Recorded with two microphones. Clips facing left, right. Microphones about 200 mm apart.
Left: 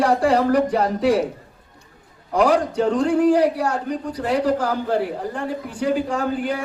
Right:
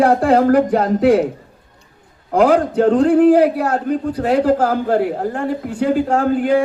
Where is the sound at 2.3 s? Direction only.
55° right (ahead or behind).